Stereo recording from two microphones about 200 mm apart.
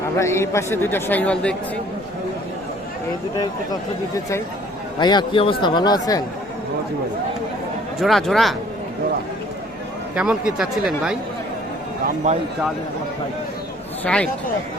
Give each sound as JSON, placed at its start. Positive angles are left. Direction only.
{"t": 0.2, "sound": "speech", "side_deg": 15}
{"t": 3.7, "sound": "speech", "side_deg": 15}
{"t": 8.0, "sound": "speech", "side_deg": 0}
{"t": 10.2, "sound": "speech", "side_deg": -5}
{"t": 12.0, "sound": "speech", "side_deg": -35}
{"t": 14.0, "sound": "speech", "side_deg": 5}